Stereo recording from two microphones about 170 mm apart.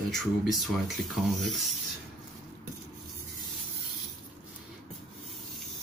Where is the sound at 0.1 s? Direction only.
Centre (ahead or behind).